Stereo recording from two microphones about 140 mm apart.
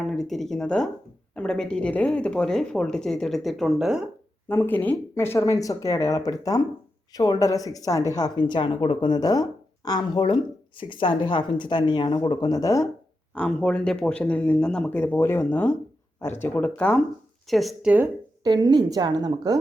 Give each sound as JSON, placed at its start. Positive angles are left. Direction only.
{"t": 0.0, "sound": "speech", "side_deg": 0}
{"t": 4.4, "sound": "a woman's voice", "side_deg": 15}
{"t": 13.3, "sound": "speech", "side_deg": 10}
{"t": 18.4, "sound": "a woman's voice", "side_deg": -30}